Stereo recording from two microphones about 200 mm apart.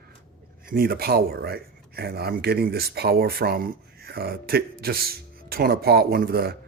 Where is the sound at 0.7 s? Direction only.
50° right (ahead or behind).